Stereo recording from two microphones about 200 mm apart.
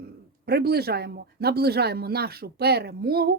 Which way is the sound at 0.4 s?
50° right (ahead or behind).